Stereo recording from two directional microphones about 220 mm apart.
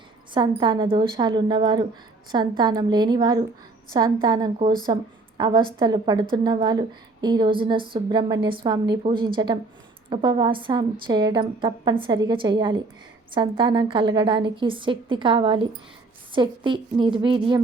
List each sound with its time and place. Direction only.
0.3 s a woman's voice: 20° right (ahead or behind)